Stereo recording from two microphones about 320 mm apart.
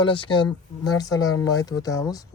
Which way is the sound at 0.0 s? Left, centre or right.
Centre.